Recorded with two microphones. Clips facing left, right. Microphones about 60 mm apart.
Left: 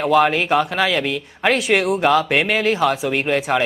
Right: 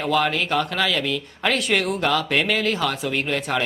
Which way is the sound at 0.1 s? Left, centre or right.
Left.